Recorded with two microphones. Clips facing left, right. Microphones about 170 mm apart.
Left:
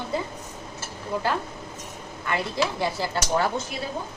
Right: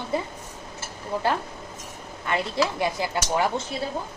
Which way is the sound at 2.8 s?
15° right (ahead or behind).